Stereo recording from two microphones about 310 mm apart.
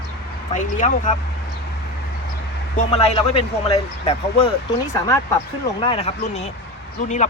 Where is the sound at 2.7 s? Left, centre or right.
Centre.